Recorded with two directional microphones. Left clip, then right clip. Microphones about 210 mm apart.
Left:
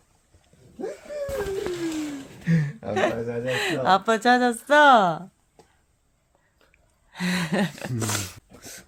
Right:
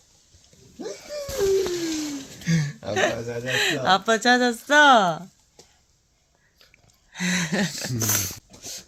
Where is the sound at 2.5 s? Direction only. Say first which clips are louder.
Even; 15° left (ahead or behind).